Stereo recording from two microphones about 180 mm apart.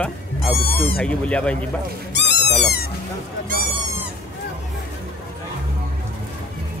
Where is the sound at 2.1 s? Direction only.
75° left (ahead or behind).